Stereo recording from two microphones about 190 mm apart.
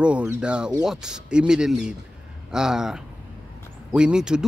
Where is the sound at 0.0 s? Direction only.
5° right (ahead or behind).